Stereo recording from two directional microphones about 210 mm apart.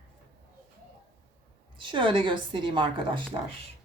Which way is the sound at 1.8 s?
25° right (ahead or behind).